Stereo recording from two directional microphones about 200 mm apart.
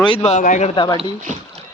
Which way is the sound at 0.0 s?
30° left (ahead or behind).